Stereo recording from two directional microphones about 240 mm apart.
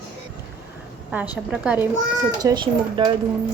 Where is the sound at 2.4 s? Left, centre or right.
Centre.